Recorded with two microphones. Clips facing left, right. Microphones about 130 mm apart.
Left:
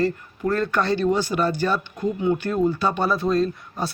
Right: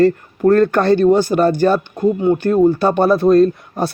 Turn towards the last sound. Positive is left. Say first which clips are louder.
# right 9 dB
turn(degrees=-60)  # may be behind; listen again after turning